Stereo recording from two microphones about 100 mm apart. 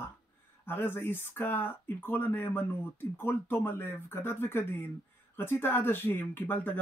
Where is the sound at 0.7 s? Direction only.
20° left (ahead or behind).